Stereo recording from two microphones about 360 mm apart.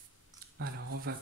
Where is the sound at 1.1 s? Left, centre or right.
Right.